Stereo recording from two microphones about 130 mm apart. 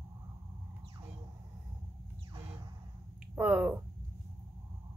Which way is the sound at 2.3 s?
30° right (ahead or behind).